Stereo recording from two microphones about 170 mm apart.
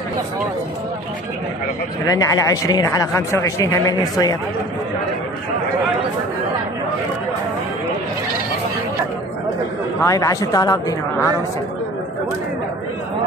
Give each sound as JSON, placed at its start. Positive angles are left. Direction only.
{"t": 2.0, "sound": "speech", "side_deg": 20}
{"t": 10.0, "sound": "speech", "side_deg": 20}